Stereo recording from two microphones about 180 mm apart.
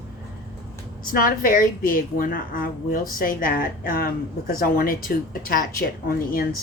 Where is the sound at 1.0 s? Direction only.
55° left (ahead or behind).